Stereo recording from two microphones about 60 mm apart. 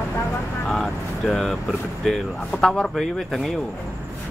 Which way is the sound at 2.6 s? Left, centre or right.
Centre.